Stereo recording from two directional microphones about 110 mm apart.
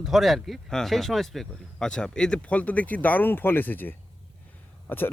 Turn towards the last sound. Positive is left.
turn(degrees=15)  # may be behind; listen again after turning